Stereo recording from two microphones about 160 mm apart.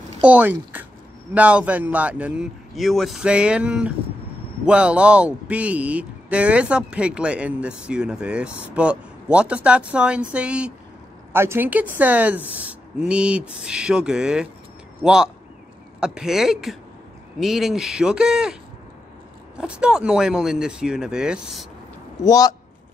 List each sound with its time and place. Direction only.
0.2 s speech: 10° right (ahead or behind)
22.2 s a man's voice: 20° left (ahead or behind)